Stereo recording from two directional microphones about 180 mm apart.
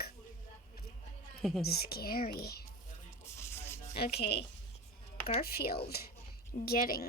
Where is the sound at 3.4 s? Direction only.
15° left (ahead or behind).